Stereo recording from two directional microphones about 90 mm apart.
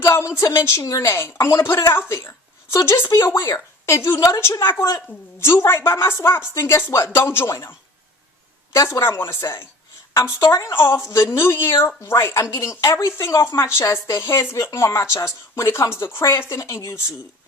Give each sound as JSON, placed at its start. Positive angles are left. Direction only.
{"t": 0.0, "sound": "speech", "side_deg": 35}
{"t": 8.7, "sound": "speech", "side_deg": 35}